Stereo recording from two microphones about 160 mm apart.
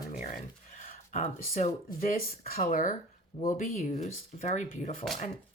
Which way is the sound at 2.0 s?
65° left (ahead or behind).